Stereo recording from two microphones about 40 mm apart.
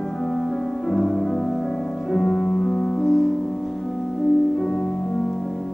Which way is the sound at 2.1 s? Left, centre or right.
Centre.